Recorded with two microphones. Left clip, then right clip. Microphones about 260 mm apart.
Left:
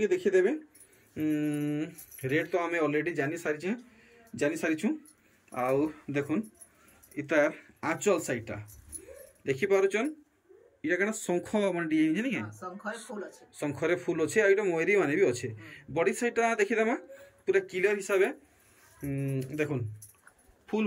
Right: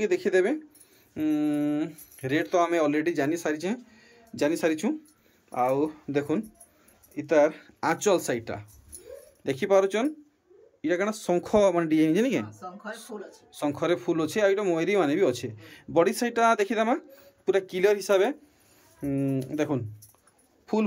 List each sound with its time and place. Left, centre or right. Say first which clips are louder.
0.0 s speech: right 2 dB; centre
1.1 s mantra: right 3 dB; centre
1.8 s speech: right 4 dB; centre
13.6 s speech: right 3 dB; centre